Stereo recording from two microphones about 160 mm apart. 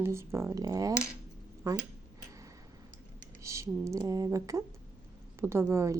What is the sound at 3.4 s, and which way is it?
Speech, 20° right (ahead or behind).